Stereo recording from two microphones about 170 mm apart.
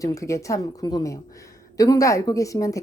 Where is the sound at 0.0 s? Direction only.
20° left (ahead or behind).